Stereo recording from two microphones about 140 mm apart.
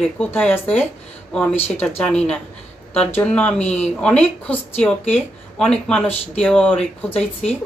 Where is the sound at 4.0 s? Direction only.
10° left (ahead or behind).